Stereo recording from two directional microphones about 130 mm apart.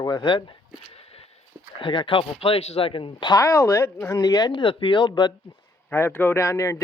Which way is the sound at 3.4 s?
20° left (ahead or behind).